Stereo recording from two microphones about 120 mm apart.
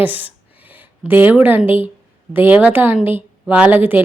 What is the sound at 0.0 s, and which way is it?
A woman's voice, 15° right (ahead or behind).